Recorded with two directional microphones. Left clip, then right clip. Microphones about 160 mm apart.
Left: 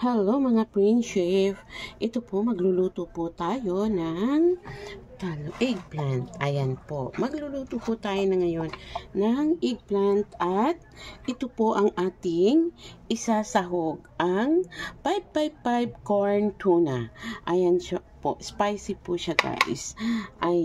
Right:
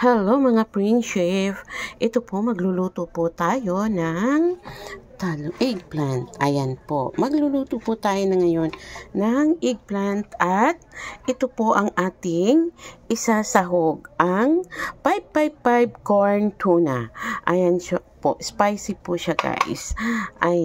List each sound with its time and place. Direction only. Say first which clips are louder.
0.0 s a woman's voice: right 7 dB; 20° right (ahead or behind)